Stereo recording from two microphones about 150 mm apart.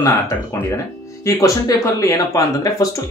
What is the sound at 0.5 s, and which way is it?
Speech, 20° left (ahead or behind).